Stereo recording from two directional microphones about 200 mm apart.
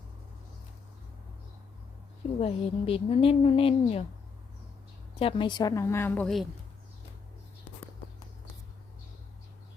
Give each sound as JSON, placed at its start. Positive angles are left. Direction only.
{"t": 2.4, "sound": "a woman's voice", "side_deg": 30}
{"t": 5.2, "sound": "a woman's voice", "side_deg": 25}